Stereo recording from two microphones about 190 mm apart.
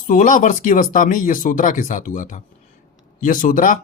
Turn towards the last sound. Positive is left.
turn(degrees=45)  # may be behind; listen again after turning